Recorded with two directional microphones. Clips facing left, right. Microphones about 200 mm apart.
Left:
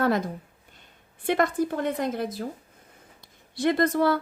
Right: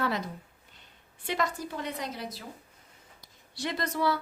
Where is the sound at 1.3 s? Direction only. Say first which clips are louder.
Left 8 dB; 55° left (ahead or behind).